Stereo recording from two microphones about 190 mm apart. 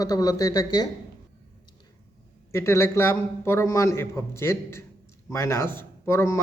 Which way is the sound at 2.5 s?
15° left (ahead or behind).